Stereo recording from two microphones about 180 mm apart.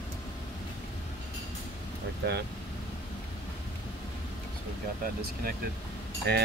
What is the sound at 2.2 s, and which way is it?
Speech, 60° right (ahead or behind).